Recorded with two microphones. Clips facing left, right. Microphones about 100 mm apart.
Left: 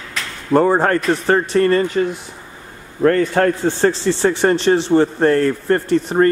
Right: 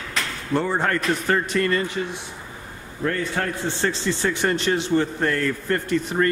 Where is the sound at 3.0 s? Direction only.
55° left (ahead or behind).